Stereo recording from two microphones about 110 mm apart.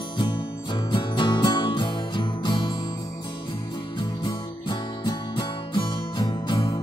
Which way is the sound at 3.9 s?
50° left (ahead or behind).